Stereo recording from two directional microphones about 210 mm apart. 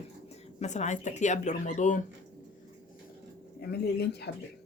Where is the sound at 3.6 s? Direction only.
50° left (ahead or behind).